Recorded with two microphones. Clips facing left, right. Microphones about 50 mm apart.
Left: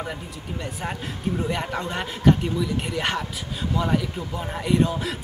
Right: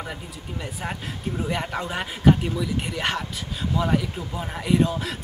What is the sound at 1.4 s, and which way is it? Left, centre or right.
Speech, centre.